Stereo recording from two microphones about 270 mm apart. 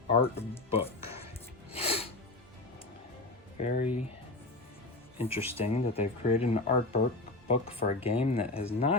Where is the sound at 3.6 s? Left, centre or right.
Left.